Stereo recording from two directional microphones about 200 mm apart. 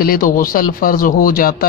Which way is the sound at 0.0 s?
45° left (ahead or behind).